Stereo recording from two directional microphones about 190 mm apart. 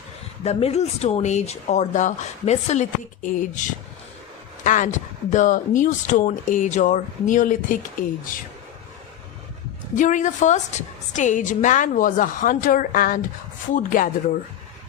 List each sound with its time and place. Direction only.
0.4 s speech: 35° left (ahead or behind)
4.6 s speech: 40° left (ahead or behind)
9.9 s a woman's voice: 40° left (ahead or behind)